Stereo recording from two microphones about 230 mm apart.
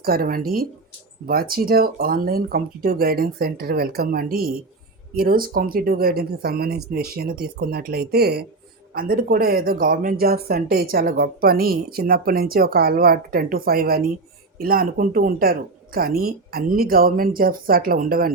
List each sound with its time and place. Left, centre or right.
0.0 s speech: right